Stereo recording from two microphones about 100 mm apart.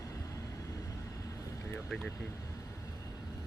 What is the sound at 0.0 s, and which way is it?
Vehicle, 35° left (ahead or behind).